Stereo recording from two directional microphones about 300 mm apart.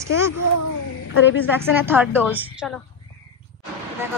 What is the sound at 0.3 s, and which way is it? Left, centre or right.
Speech, left.